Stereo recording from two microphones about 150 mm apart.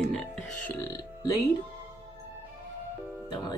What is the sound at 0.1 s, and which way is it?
Speech, 5° left (ahead or behind).